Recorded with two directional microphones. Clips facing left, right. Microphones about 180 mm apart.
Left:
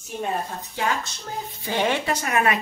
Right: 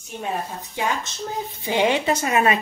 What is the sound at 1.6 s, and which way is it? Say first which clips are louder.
Speech: right 3 dB; 15° right (ahead or behind).